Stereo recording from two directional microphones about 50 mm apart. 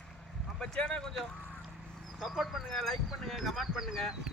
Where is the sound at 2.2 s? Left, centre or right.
Centre.